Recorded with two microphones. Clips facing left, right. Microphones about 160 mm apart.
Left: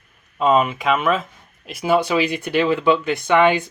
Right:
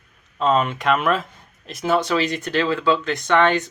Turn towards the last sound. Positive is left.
turn(degrees=10)  # may be behind; listen again after turning